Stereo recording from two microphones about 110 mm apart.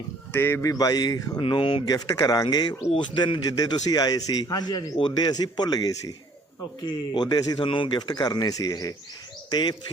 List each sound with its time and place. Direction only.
0.3 s speech: 20° left (ahead or behind)
0.7 s a man's voice: 35° left (ahead or behind)
1.4 s speech: 50° left (ahead or behind)
1.9 s a man's voice: 35° left (ahead or behind)
9.5 s speech: 45° left (ahead or behind)